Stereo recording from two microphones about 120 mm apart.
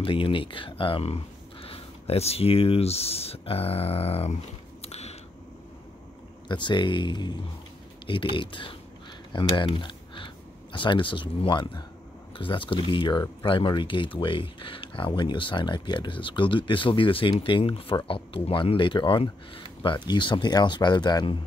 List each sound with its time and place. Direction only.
0.0 s speech: 45° left (ahead or behind)
4.8 s a sound: 60° left (ahead or behind)
6.5 s speech: 40° left (ahead or behind)